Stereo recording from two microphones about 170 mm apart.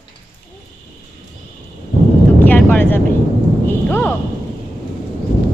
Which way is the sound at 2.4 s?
10° left (ahead or behind).